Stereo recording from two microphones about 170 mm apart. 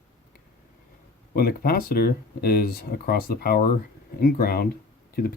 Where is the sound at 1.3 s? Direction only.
60° left (ahead or behind).